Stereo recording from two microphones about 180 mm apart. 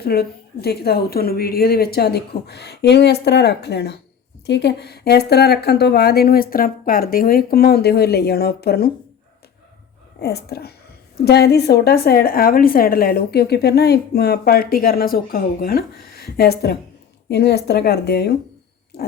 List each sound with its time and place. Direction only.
0.0 s a woman's voice: 60° left (ahead or behind)
10.2 s a woman's voice: 65° left (ahead or behind)
18.9 s a sound: 65° left (ahead or behind)